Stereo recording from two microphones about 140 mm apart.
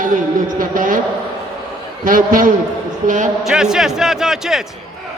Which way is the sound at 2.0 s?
80° right.